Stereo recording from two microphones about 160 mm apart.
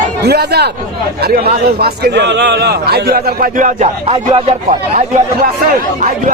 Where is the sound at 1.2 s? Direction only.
75° right (ahead or behind); by 4.2 s 45° right (ahead or behind).